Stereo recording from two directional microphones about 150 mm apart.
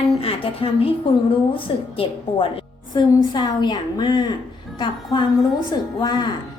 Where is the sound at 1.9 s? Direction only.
35° left (ahead or behind).